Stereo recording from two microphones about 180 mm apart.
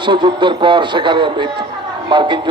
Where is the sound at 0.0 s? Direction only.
25° right (ahead or behind).